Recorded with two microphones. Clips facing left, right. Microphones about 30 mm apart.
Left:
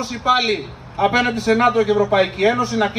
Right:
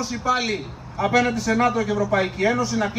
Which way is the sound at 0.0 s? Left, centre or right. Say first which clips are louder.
Left 5 dB; left.